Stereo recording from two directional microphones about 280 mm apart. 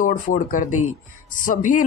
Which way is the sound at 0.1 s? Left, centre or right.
Left.